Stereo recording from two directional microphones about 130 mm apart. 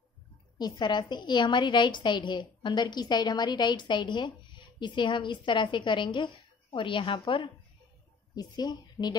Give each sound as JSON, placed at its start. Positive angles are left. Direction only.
{"t": 0.6, "sound": "a woman's voice", "side_deg": 35}